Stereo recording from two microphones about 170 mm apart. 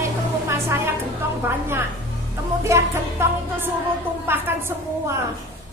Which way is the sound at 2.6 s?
15° right (ahead or behind).